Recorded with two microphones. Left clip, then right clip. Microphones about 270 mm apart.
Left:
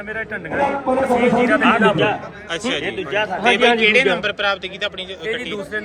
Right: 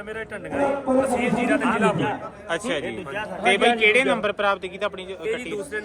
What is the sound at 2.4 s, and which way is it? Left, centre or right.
A man's voice, right.